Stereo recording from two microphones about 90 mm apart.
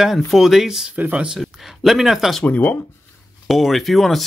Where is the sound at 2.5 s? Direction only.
20° left (ahead or behind).